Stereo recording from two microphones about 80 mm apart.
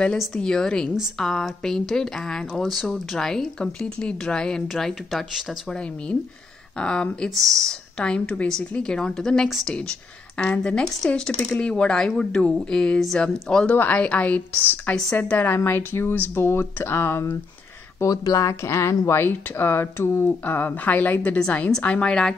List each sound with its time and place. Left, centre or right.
0.3 s a woman's voice: centre
5.7 s a woman's voice: centre
9.5 s speech: centre
10.3 s a woman's voice: centre; by 17.4 s left
18.0 s speech: left
21.4 s a woman's voice: centre